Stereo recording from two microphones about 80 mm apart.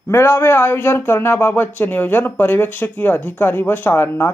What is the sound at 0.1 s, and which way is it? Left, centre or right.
Speech, left.